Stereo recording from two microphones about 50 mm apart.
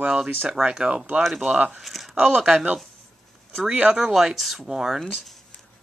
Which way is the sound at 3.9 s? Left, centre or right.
Centre.